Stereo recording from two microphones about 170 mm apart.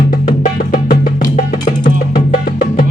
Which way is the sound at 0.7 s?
60° left (ahead or behind).